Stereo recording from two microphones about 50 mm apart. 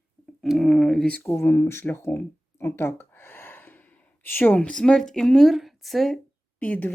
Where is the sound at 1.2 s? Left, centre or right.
Left.